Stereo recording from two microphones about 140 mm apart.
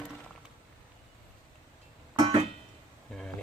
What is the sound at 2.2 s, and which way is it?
Music, 40° right (ahead or behind).